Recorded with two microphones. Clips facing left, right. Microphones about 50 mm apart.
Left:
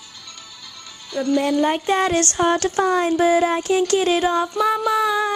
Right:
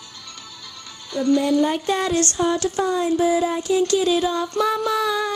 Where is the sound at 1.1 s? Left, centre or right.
Left.